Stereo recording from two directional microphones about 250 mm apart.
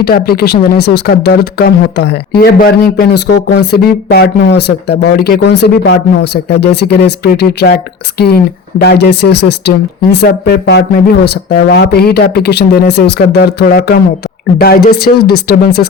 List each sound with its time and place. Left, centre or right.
0.0 s speech: left